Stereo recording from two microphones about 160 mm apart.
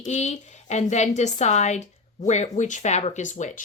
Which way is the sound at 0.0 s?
45° left (ahead or behind).